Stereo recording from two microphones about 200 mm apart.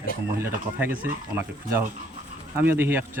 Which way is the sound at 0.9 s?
45° right (ahead or behind).